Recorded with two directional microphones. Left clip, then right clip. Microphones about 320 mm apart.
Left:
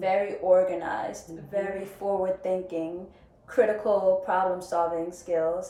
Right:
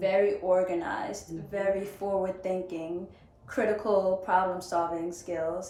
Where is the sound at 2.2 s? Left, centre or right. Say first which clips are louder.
Left 4 dB; centre.